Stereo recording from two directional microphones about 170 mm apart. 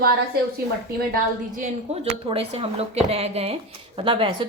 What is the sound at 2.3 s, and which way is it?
A woman's voice, 35° right (ahead or behind).